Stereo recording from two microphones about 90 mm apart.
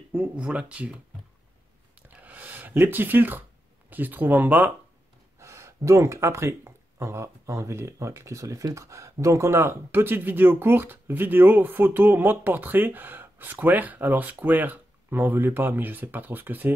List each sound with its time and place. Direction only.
0.1 s speech: 15° right (ahead or behind)
2.0 s a sound: 20° right (ahead or behind)
3.9 s speech: 20° right (ahead or behind)
5.4 s speech: 30° right (ahead or behind)